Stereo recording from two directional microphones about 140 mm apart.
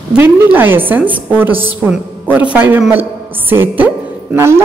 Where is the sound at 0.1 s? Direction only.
10° right (ahead or behind).